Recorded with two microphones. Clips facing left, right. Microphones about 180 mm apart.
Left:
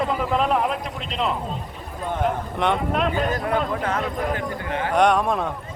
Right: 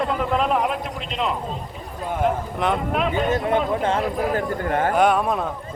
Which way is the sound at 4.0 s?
5° right (ahead or behind).